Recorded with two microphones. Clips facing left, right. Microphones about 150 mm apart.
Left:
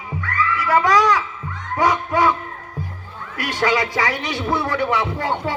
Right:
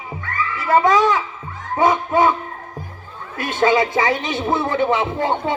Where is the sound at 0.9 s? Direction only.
25° right (ahead or behind).